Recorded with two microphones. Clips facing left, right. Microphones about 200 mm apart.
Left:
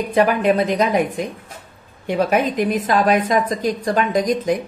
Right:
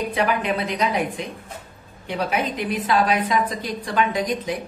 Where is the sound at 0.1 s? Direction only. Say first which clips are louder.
Left 11 dB; 45° left (ahead or behind).